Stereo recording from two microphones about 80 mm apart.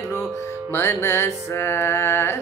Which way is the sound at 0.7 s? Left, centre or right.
Left.